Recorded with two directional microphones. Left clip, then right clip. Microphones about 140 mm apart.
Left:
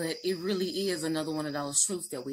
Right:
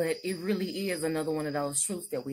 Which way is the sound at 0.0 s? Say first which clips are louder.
Right 1 dB; 15° right (ahead or behind).